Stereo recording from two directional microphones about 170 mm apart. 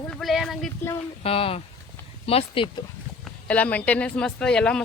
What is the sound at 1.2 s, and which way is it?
Speech, 35° left (ahead or behind).